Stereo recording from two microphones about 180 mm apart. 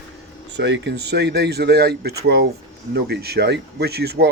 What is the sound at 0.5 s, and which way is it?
A man's voice, 80° right.